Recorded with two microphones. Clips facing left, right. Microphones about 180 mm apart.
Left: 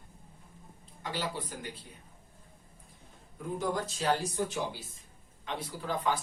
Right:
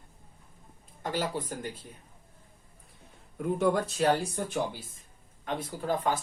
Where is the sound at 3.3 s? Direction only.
65° right (ahead or behind).